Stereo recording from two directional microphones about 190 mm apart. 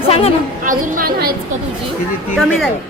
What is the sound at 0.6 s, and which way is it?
Speech, 45° right (ahead or behind).